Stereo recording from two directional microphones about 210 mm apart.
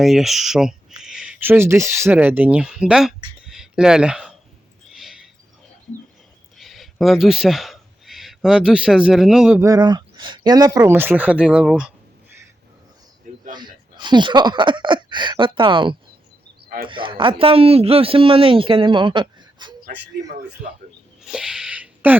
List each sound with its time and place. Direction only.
0.0 s speech: centre (ahead or behind)
3.4 s a sound: centre (ahead or behind)
6.6 s speech: centre (ahead or behind)
9.6 s speech: 15° right (ahead or behind)
13.5 s speech: 20° right (ahead or behind)
16.6 s a man's voice: 45° right (ahead or behind)
16.9 s speech: 25° right (ahead or behind)
21.2 s a sound: 5° right (ahead or behind)